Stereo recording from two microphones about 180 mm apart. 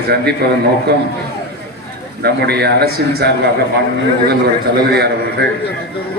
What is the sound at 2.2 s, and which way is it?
A man's voice, 65° right (ahead or behind).